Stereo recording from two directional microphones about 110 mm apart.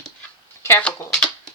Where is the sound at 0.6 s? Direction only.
20° left (ahead or behind).